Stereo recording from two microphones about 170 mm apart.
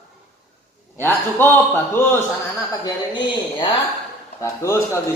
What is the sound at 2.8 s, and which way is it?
A man's voice, 25° left (ahead or behind).